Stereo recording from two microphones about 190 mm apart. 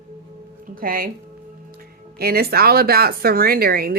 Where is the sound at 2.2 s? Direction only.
55° right (ahead or behind).